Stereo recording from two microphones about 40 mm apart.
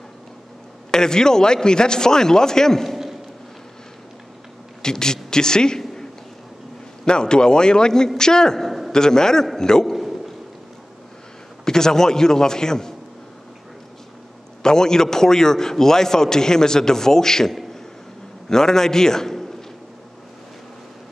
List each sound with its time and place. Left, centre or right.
0.9 s a man's voice: centre
4.8 s a man's voice: centre
7.1 s a man's voice: left
9.9 s a sound: centre
11.6 s a man's voice: centre
14.6 s a man's voice: centre